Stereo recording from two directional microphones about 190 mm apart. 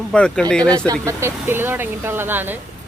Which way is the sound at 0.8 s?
15° right (ahead or behind).